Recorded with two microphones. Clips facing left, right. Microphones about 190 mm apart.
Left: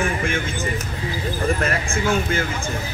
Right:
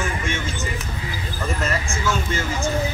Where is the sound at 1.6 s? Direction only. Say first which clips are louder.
Left 2 dB; 55° left (ahead or behind).